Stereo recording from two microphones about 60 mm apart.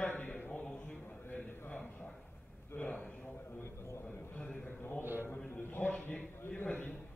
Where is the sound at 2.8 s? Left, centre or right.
Left.